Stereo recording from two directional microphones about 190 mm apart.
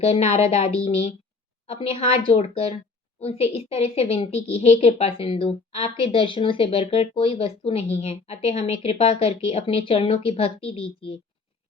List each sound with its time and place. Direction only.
0.0 s a woman's voice: 35° left (ahead or behind)